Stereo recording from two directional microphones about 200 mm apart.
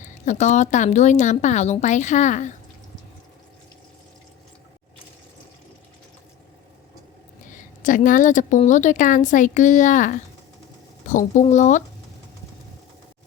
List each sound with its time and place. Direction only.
0.0 s speech: 35° left (ahead or behind)
7.8 s speech: 40° left (ahead or behind)